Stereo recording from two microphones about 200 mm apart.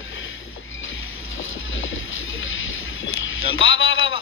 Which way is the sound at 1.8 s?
75° left (ahead or behind).